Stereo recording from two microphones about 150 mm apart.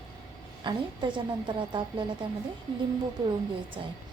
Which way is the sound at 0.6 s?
30° right (ahead or behind).